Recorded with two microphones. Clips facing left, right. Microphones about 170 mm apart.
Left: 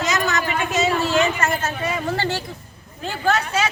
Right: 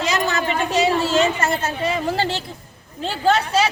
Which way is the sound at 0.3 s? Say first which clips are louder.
Right 1 dB; 30° right (ahead or behind).